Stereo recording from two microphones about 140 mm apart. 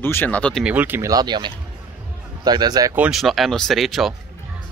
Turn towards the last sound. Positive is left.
turn(degrees=0)  # may be behind; listen again after turning